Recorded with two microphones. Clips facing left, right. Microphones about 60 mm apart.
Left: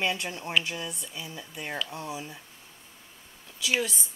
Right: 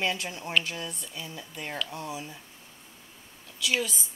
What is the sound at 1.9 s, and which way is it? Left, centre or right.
Speech, centre.